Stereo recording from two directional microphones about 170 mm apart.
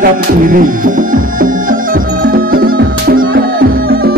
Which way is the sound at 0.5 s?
50° right (ahead or behind).